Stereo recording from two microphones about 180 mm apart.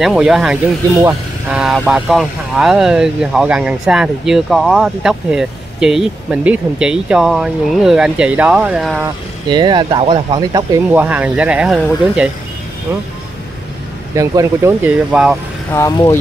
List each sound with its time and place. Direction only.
0.0 s speech: centre (ahead or behind)
9.5 s speech: 25° right (ahead or behind)
10.9 s speech: 10° right (ahead or behind)
14.1 s speech: 15° right (ahead or behind)
15.7 s speech: 15° left (ahead or behind)